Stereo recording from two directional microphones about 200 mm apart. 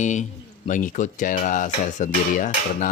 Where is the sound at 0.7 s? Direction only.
40° left (ahead or behind).